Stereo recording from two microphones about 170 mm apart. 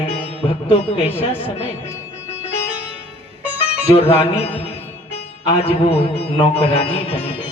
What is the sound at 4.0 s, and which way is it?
Music, 35° left (ahead or behind).